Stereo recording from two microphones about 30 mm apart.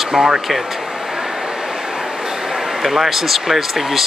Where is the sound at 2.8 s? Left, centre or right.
Centre.